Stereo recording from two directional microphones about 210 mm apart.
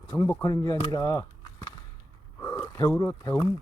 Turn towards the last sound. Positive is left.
turn(degrees=15)  # may be behind; listen again after turning